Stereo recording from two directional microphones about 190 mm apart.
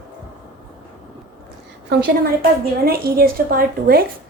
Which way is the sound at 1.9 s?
55° right (ahead or behind).